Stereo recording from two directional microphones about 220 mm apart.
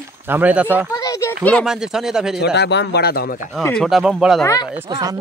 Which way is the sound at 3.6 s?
5° left (ahead or behind).